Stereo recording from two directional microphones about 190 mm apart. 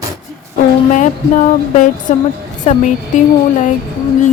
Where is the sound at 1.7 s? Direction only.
45° left (ahead or behind).